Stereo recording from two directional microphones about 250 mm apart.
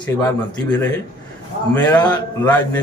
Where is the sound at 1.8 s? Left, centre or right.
Centre.